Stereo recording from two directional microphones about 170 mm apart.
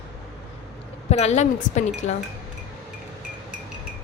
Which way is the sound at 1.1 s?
40° left (ahead or behind).